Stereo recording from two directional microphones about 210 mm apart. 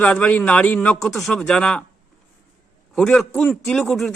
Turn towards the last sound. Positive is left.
turn(degrees=0)  # may be behind; listen again after turning